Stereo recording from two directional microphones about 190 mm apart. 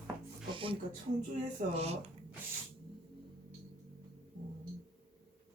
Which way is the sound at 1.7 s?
35° right (ahead or behind).